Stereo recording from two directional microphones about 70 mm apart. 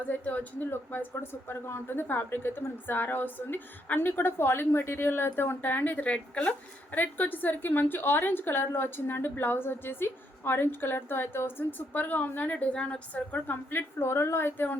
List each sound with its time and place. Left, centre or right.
0.0 s a woman's voice: left
6.9 s a woman's voice: left